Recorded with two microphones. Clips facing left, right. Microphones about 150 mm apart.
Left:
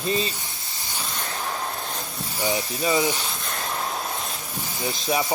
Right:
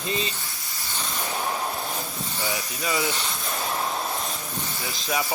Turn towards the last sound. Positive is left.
turn(degrees=20)  # may be behind; listen again after turning